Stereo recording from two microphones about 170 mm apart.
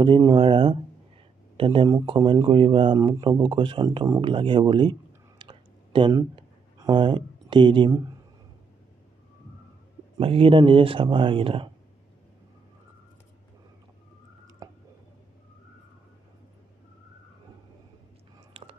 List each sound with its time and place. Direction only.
0.0 s speech: 25° right (ahead or behind)
5.4 s a sound: 30° right (ahead or behind)
10.1 s speech: 30° right (ahead or behind)